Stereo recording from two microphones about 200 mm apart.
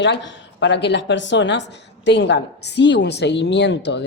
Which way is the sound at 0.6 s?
60° left (ahead or behind).